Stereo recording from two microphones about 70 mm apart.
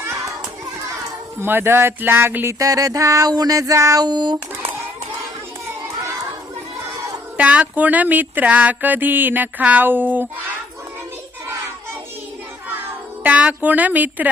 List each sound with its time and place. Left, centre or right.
0.0 s children playing: right
1.4 s speech: right
2.6 s a sound: right
4.0 s speech: right
7.3 s speech: centre
13.2 s speech: right